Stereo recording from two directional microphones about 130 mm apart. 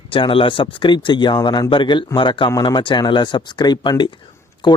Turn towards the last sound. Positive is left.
turn(degrees=35)  # may be behind; listen again after turning